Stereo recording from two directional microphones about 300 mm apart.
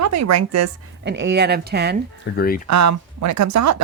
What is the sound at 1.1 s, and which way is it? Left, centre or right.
Speech, right.